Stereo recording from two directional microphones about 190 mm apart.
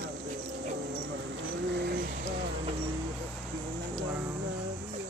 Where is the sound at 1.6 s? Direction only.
60° right (ahead or behind).